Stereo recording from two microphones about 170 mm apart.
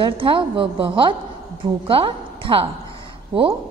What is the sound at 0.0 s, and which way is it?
A woman's voice, 30° right (ahead or behind).